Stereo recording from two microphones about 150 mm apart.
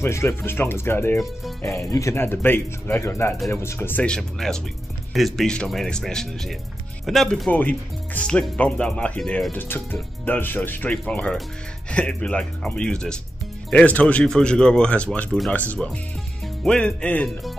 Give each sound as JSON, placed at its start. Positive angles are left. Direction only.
{"t": 0.0, "sound": "speech", "side_deg": 15}
{"t": 1.1, "sound": "speech", "side_deg": 0}
{"t": 1.9, "sound": "speech", "side_deg": 20}